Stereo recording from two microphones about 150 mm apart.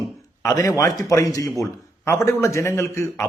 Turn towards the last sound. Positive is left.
turn(degrees=20)  # may be behind; listen again after turning